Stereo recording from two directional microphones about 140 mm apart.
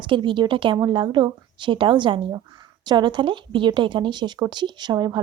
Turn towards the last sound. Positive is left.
turn(degrees=-30)  # may be behind; listen again after turning